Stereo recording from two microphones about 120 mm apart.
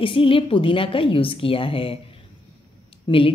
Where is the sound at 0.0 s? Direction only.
50° left (ahead or behind).